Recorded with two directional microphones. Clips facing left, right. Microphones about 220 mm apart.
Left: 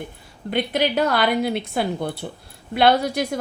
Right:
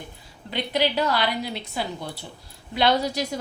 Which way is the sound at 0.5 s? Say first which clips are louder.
Left 3 dB; 50° left (ahead or behind).